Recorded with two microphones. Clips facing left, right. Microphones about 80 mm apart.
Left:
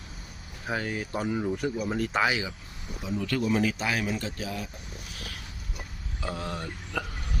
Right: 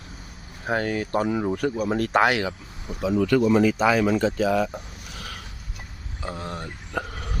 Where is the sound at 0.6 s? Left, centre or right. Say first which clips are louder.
Right 6 dB; right.